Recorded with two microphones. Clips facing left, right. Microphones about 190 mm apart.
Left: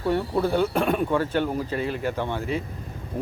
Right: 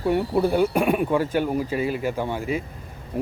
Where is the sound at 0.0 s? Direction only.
10° right (ahead or behind).